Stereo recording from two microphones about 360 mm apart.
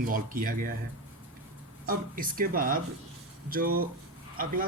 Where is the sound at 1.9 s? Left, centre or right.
Right.